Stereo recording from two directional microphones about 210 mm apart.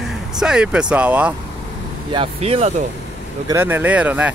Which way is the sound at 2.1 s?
25° right (ahead or behind).